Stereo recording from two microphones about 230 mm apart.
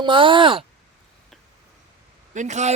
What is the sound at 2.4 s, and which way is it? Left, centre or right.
Speech, right.